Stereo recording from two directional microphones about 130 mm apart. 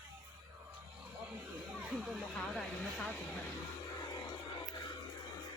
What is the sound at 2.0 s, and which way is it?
Speech, 5° left (ahead or behind).